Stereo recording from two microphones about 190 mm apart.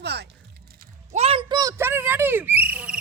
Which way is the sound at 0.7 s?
35° right (ahead or behind).